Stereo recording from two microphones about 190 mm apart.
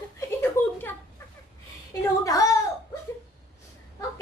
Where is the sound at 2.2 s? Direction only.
15° left (ahead or behind).